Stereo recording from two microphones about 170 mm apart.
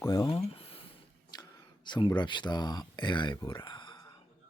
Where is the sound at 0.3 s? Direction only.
35° left (ahead or behind).